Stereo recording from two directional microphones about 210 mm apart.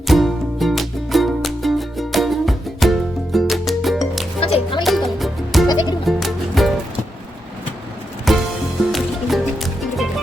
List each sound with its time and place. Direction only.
0.1 s music: centre (ahead or behind)
4.4 s music: 25° left (ahead or behind)
4.8 s music: centre (ahead or behind)
8.3 s music: centre (ahead or behind)